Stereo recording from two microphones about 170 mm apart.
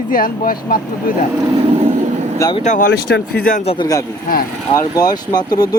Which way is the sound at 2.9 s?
65° left (ahead or behind).